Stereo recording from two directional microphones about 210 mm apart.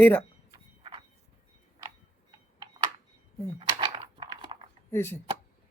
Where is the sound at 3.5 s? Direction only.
25° right (ahead or behind).